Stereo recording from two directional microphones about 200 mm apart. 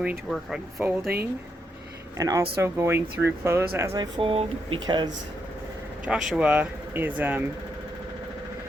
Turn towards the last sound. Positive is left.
turn(degrees=-10)  # may be behind; listen again after turning